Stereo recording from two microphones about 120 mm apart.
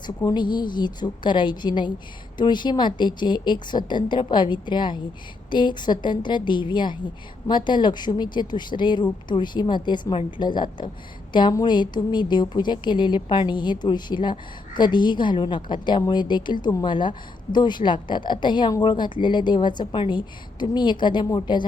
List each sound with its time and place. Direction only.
0.2 s a woman's voice: 35° left (ahead or behind)